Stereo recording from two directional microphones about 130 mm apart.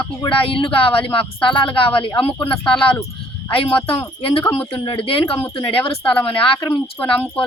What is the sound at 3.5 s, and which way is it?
A woman's voice, 45° left (ahead or behind).